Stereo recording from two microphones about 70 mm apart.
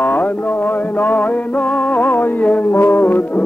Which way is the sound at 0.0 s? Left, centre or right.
Left.